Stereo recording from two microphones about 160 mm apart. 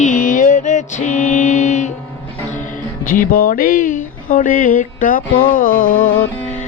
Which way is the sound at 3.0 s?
60° left (ahead or behind).